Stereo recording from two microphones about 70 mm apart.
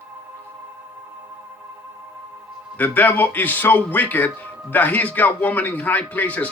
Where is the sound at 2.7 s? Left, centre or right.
Left.